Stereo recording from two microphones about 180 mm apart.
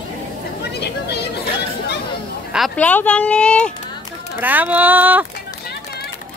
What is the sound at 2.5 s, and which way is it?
Speech, centre (ahead or behind).